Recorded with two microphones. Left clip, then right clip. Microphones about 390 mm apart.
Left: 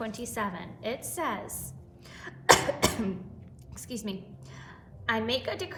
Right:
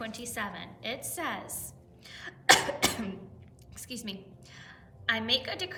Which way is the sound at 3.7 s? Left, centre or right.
Centre.